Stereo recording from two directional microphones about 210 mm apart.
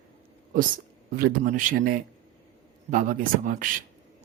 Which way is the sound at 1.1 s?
40° right (ahead or behind).